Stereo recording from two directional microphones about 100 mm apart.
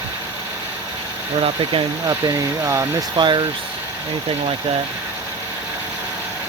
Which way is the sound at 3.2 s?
50° right (ahead or behind).